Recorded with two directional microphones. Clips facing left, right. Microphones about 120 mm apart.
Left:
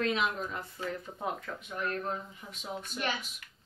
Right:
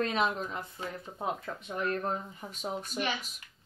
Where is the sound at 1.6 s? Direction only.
40° right (ahead or behind).